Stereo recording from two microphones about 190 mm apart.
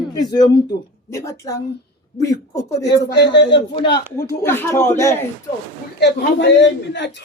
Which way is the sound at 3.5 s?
25° left (ahead or behind).